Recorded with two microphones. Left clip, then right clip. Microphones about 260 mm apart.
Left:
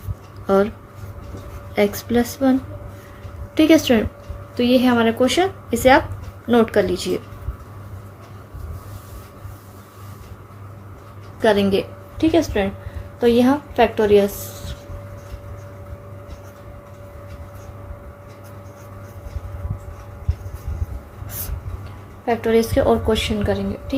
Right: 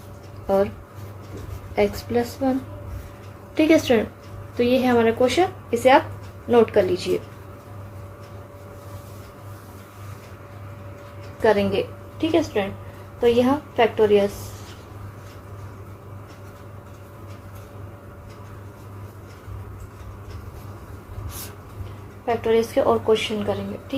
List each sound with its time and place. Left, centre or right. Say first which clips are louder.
0.4 s speech: left 3 dB; left
1.7 s a woman's voice: left 3 dB; left
3.6 s a woman's voice: left 3 dB; left
11.4 s a woman's voice: left 2 dB; left
22.3 s a woman's voice: left 2 dB; left